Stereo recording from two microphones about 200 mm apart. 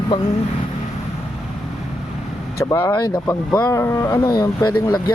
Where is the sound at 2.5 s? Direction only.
15° left (ahead or behind).